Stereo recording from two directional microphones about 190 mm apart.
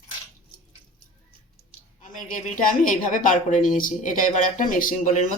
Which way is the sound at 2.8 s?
45° left (ahead or behind).